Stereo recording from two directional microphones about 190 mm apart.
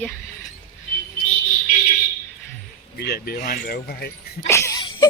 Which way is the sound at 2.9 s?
60° left (ahead or behind).